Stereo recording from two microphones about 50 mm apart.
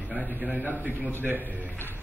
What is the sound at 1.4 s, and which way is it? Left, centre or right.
Speech, left.